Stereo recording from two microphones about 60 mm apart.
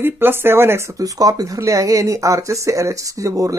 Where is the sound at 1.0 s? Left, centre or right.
Right.